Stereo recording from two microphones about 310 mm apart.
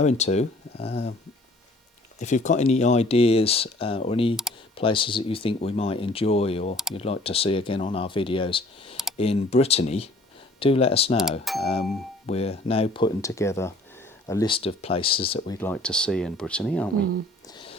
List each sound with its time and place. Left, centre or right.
0.0 s speech: left
2.1 s speech: left
15.6 s speech: centre